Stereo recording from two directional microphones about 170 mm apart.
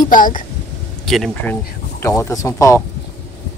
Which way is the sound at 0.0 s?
50° left (ahead or behind).